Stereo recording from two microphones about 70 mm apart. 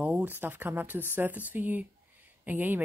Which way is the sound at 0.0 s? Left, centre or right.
Right.